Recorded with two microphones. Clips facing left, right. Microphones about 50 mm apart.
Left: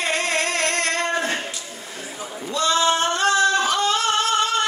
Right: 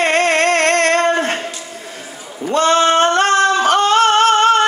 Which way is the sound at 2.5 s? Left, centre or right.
Right.